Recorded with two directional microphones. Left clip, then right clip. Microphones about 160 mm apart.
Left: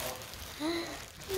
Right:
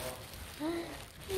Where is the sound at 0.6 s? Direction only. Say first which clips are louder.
Left 2 dB; 10° left (ahead or behind).